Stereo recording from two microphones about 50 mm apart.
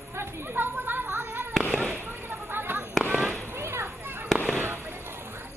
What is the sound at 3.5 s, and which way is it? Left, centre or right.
Children playing, right.